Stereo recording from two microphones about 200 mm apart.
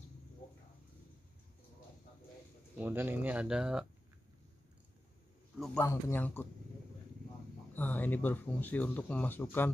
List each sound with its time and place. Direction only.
2.8 s speech: 10° right (ahead or behind)
5.6 s speech: 10° left (ahead or behind)
7.7 s speech: 10° left (ahead or behind)